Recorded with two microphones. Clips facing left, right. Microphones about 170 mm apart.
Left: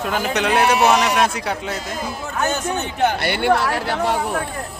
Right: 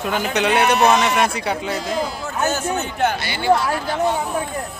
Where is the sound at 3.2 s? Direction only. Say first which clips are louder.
Even; 60° left (ahead or behind).